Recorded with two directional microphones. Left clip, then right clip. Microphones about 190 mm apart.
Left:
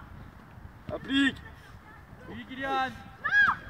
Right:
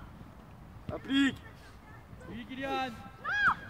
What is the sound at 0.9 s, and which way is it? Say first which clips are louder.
Speech: left 3 dB; 45° left (ahead or behind).